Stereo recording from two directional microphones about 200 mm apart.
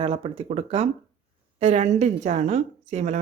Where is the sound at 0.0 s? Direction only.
25° right (ahead or behind).